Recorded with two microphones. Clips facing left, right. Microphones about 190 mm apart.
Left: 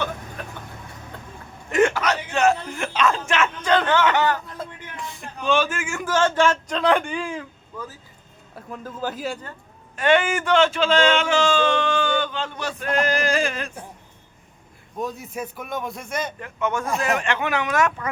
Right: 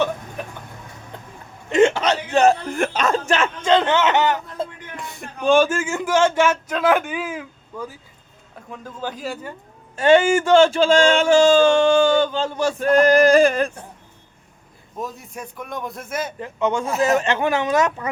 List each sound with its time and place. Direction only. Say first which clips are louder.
1.7 s hiccup: right 4 dB; 25° right (ahead or behind)
2.7 s speech: right 2 dB; 45° right (ahead or behind); by 4.7 s 25° right (ahead or behind)
5.4 s a sound: right 6 dB; 45° right (ahead or behind)
6.1 s speech: right 2 dB; 10° right (ahead or behind)
8.5 s a man's voice: left 1 dB; 5° left (ahead or behind)
9.9 s speech: right 5 dB; 25° right (ahead or behind)
10.8 s a sound: right 4 dB; 45° right (ahead or behind)
11.9 s male singing: right 7 dB; 40° right (ahead or behind)
14.9 s speech: left 2 dB; centre (ahead or behind)
16.4 s speech: right 4 dB; 30° right (ahead or behind)